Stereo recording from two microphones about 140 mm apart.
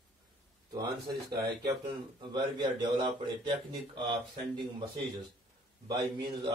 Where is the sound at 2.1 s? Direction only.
30° right (ahead or behind).